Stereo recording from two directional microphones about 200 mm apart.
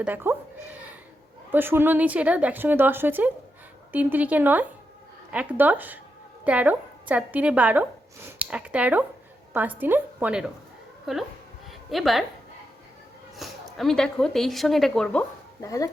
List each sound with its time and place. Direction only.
0.0 s a woman's voice: 10° right (ahead or behind)
13.3 s speech: centre (ahead or behind)
15.6 s speech: 15° left (ahead or behind)